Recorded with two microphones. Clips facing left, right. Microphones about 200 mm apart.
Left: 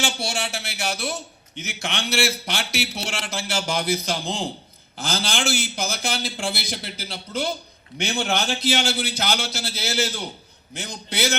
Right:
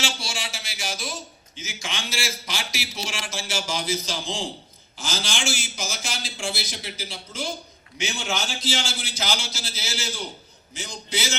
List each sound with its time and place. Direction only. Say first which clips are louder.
0.0 s a man's voice: left 5 dB; 60° left (ahead or behind)